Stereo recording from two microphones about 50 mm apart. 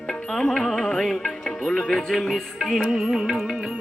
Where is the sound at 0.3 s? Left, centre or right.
Centre.